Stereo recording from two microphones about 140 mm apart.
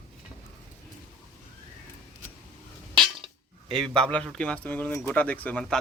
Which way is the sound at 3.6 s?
5° left (ahead or behind).